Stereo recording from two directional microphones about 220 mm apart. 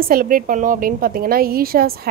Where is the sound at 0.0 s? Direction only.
40° right (ahead or behind).